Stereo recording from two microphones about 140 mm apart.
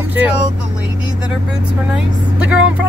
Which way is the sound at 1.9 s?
10° right (ahead or behind).